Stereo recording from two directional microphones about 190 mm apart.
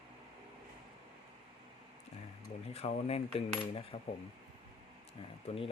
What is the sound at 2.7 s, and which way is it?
Speech, 35° left (ahead or behind).